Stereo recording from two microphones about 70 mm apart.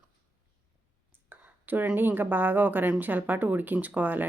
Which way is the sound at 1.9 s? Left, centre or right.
Right.